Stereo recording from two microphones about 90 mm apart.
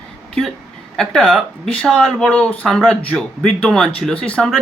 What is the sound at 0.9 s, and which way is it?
Speech, 10° left (ahead or behind).